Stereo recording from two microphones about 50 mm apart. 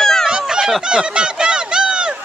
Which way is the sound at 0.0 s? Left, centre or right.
Centre.